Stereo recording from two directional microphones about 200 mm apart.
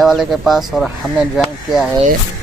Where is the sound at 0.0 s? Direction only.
Centre (ahead or behind).